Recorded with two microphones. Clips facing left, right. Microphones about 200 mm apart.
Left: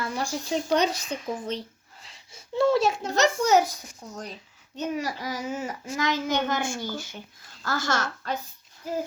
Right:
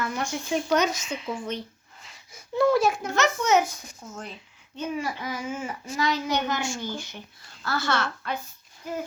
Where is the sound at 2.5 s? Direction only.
25° left (ahead or behind); by 8.3 s 45° left (ahead or behind).